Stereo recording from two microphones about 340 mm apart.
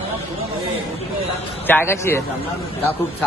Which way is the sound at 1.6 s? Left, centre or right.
Centre.